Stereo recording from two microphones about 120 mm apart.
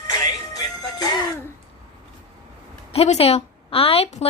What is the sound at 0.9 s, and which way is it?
Music, 35° left (ahead or behind).